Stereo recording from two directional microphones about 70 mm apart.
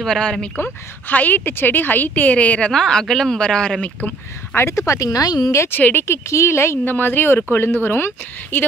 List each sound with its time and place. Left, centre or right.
0.0 s speech: centre
0.6 s speech: left
2.7 s speech: centre
4.6 s speech: left
5.5 s speech: left
5.8 s speech: left
6.3 s speech: left
6.8 s speech: left